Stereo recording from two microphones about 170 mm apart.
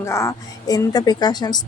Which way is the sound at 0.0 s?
15° left (ahead or behind).